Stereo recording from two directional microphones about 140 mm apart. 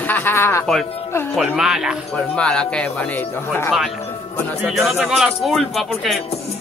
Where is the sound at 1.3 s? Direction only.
5° right (ahead or behind).